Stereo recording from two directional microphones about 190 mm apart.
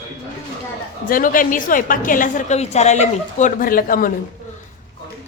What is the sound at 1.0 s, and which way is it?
A woman's voice, 45° left (ahead or behind).